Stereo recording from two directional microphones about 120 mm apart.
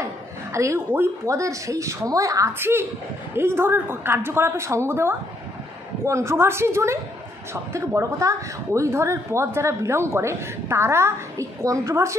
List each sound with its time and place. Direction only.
0.0 s speech: 25° right (ahead or behind)